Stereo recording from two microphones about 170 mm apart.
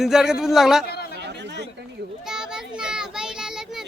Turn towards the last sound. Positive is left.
turn(degrees=-5)  # may be behind; listen again after turning